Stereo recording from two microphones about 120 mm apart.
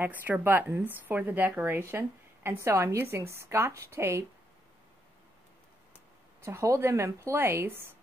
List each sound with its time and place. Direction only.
0.0 s a woman's voice: 15° right (ahead or behind)
6.4 s a woman's voice: 25° right (ahead or behind)